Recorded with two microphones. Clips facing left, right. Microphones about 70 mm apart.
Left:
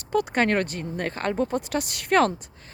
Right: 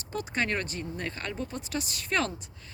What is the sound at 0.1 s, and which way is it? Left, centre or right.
Speech, left.